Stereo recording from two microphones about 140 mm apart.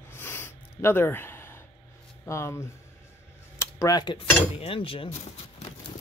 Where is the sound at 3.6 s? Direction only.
25° left (ahead or behind).